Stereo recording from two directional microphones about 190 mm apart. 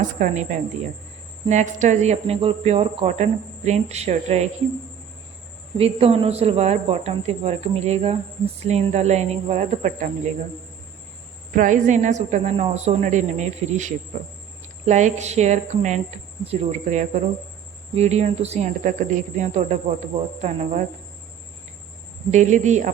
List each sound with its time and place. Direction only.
0.0 s speech: 40° right (ahead or behind)
5.7 s speech: 30° right (ahead or behind)
11.5 s speech: 40° right (ahead or behind)
22.3 s speech: 40° right (ahead or behind)